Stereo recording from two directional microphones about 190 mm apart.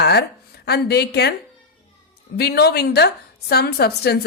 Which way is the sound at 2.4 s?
55° left (ahead or behind).